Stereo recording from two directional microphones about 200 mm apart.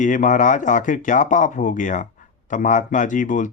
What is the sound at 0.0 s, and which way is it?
Speech, 40° left (ahead or behind).